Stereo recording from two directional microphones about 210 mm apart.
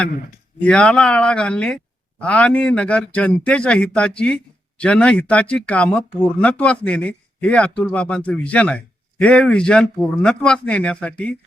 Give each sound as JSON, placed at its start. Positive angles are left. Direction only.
{"t": 0.6, "sound": "speech", "side_deg": 5}